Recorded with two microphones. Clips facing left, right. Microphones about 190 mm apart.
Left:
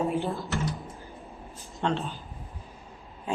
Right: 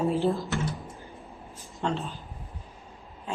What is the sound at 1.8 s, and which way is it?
Speech, centre (ahead or behind).